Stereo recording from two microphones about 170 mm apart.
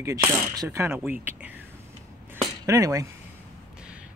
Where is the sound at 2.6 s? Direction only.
20° right (ahead or behind).